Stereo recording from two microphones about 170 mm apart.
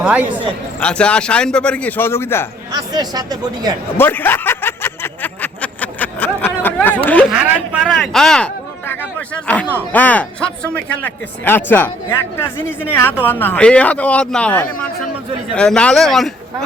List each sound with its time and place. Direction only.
0.0 s speech: 10° right (ahead or behind)
0.8 s speech: 5° left (ahead or behind)
2.7 s speech: 25° right (ahead or behind)
3.9 s a sound: 10° left (ahead or behind)
7.3 s speech: 5° right (ahead or behind)